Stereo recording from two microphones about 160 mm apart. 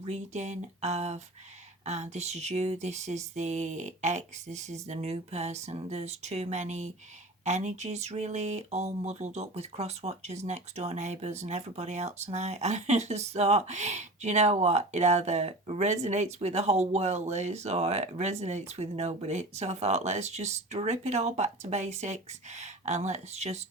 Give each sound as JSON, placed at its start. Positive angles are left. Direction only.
{"t": 0.0, "sound": "speech", "side_deg": -45}